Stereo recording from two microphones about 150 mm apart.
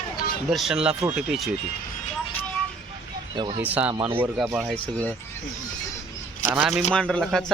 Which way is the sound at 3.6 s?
10° right (ahead or behind).